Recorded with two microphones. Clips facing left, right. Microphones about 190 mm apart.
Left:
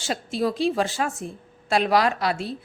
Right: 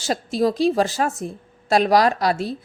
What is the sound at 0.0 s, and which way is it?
A woman's voice, 40° right (ahead or behind).